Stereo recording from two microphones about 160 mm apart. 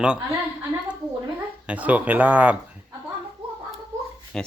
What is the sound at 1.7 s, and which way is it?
Speech, 10° right (ahead or behind).